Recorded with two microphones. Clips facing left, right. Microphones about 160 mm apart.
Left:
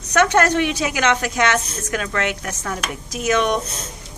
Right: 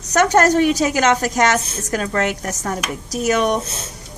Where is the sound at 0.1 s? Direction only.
40° right (ahead or behind).